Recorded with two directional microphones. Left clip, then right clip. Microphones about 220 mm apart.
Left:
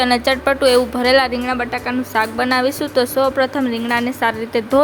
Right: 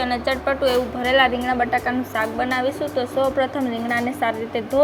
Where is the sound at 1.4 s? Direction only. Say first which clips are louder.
Even; 15° left (ahead or behind).